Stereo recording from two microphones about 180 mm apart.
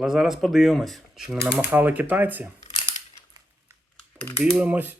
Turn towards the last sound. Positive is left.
turn(degrees=-10)  # may be behind; listen again after turning